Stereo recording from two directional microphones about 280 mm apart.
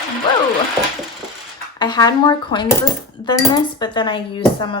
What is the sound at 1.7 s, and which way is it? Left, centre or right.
Speech, centre.